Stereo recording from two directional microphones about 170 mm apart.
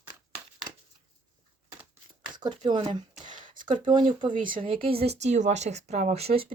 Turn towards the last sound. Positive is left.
turn(degrees=-35)  # may be behind; listen again after turning